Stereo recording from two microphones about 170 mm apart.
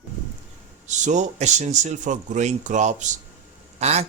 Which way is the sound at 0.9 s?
45° right (ahead or behind).